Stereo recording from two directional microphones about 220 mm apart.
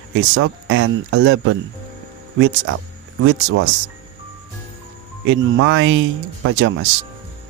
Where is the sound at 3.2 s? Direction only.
70° right (ahead or behind).